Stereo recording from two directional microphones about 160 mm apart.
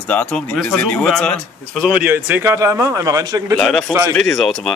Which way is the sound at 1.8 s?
5° right (ahead or behind).